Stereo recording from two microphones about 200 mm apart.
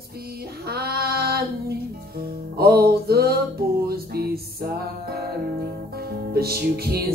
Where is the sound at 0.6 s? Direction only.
50° right (ahead or behind).